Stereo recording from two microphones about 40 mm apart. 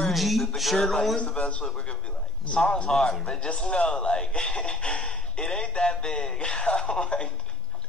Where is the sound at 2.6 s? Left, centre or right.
Centre.